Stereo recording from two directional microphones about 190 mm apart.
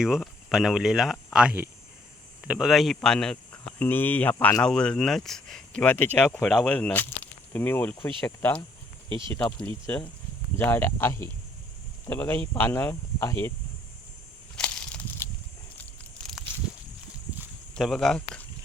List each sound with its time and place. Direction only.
0.0 s speech: centre (ahead or behind)
9.0 s speech: 25° right (ahead or behind)
9.3 s speech: 10° left (ahead or behind)
14.5 s a sound: 5° left (ahead or behind)
17.7 s speech: centre (ahead or behind)